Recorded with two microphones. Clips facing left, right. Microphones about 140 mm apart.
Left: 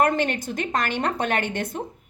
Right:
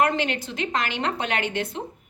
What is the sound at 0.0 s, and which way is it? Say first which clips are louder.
A woman's voice: left 1 dB; 45° left (ahead or behind).